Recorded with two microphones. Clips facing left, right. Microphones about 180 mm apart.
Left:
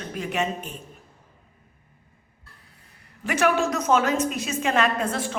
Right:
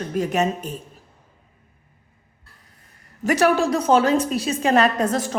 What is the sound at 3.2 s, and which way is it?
A woman's voice, 35° right (ahead or behind).